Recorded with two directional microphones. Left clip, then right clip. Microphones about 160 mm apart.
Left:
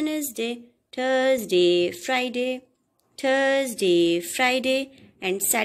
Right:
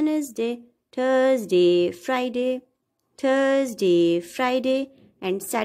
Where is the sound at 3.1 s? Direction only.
45° right (ahead or behind).